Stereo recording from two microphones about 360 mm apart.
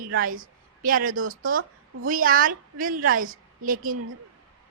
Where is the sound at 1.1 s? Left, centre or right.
Right.